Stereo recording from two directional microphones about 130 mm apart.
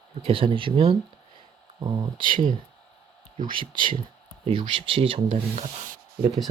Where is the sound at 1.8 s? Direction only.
30° right (ahead or behind).